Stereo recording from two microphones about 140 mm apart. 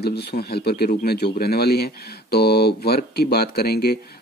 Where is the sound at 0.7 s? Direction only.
85° left.